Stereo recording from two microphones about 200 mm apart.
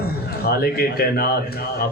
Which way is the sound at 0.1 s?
50° left (ahead or behind).